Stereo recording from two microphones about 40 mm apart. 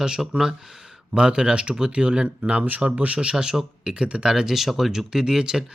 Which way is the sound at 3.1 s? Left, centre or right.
Right.